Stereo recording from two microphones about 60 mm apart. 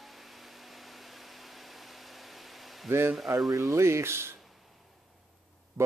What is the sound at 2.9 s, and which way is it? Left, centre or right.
Speech, right.